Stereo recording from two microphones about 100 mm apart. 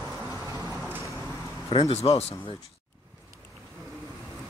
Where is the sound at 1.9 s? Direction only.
90° left.